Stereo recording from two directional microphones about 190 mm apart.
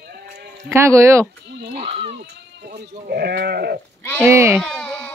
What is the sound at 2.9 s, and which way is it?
Speech, 50° right (ahead or behind).